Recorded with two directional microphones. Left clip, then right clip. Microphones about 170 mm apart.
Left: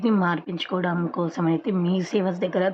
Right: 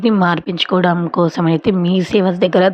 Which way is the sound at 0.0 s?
25° right (ahead or behind).